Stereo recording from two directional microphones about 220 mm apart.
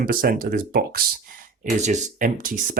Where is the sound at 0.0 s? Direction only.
40° right (ahead or behind).